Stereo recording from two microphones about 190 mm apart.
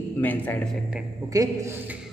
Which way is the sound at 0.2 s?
10° left (ahead or behind).